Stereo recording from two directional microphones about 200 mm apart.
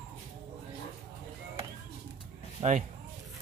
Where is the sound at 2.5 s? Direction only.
35° right (ahead or behind).